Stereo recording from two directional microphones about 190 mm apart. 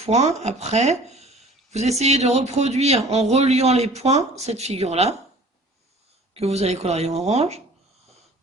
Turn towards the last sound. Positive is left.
turn(degrees=-35)  # may be behind; listen again after turning